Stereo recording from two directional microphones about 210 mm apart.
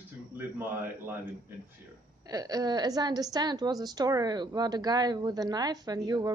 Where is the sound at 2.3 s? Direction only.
15° right (ahead or behind).